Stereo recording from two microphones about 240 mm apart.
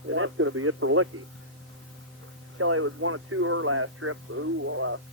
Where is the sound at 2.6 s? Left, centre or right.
Right.